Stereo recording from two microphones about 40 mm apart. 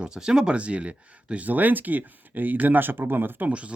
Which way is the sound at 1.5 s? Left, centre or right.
Right.